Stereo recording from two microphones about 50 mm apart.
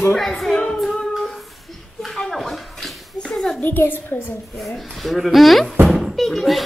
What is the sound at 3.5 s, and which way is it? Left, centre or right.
Speech, left.